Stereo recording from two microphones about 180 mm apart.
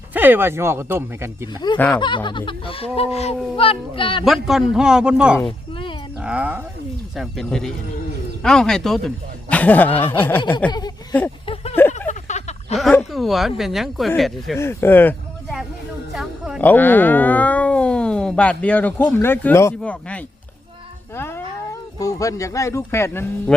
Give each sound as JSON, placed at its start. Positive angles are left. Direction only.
{"t": 0.1, "sound": "speech", "side_deg": -10}
{"t": 2.0, "sound": "speech", "side_deg": 25}
{"t": 4.3, "sound": "a man's voice", "side_deg": 0}
{"t": 10.7, "sound": "speech", "side_deg": 20}
{"t": 11.4, "sound": "a sound", "side_deg": 35}
{"t": 12.9, "sound": "a man's voice", "side_deg": 0}
{"t": 14.5, "sound": "speech", "side_deg": 15}
{"t": 16.1, "sound": "music", "side_deg": -5}
{"t": 16.6, "sound": "speech", "side_deg": 10}